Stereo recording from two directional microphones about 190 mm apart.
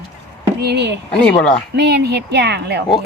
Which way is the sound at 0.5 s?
60° right (ahead or behind).